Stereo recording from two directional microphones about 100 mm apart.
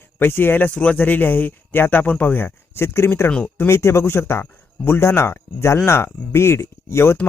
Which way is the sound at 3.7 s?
25° left (ahead or behind).